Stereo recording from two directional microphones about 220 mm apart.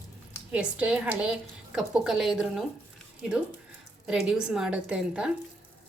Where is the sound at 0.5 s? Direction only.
5° right (ahead or behind).